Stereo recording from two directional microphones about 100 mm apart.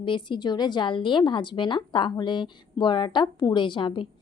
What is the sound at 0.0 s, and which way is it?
Speech, 55° left (ahead or behind).